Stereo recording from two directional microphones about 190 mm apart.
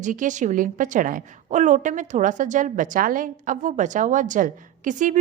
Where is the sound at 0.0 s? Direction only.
40° right (ahead or behind).